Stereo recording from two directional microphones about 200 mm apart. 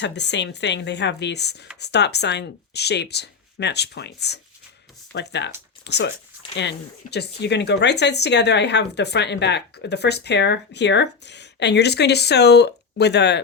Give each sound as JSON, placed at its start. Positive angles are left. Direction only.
{"t": 0.0, "sound": "speech", "side_deg": 60}